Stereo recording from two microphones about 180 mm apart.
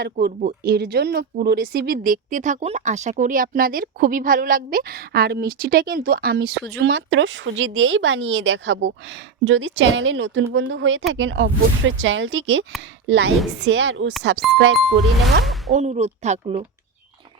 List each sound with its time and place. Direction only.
0.0 s speech: 60° right (ahead or behind); by 12.6 s 90° right
13.1 s a woman's voice: 75° right (ahead or behind)
13.7 s speech: 90° right
14.2 s speech: 75° right (ahead or behind)
15.7 s speech: 40° right (ahead or behind)